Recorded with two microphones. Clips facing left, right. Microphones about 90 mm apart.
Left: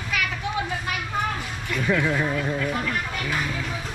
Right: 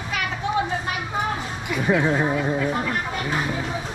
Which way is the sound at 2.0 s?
30° right (ahead or behind).